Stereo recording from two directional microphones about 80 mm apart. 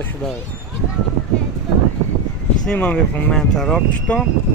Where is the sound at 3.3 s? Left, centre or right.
Centre.